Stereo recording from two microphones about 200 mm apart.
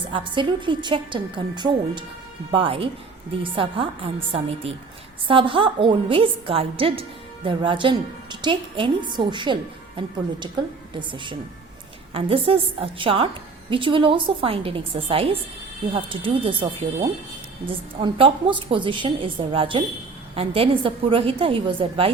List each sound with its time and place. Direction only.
0.0 s a woman's voice: 25° right (ahead or behind)
11.1 s a woman's voice: 25° right (ahead or behind)
12.5 s a woman's voice: 25° right (ahead or behind)